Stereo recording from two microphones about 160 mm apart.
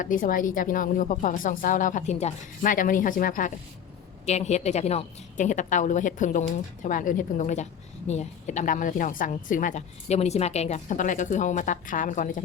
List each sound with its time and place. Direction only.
0.0 s speech: 55° left (ahead or behind)
4.3 s a woman's voice: 45° left (ahead or behind)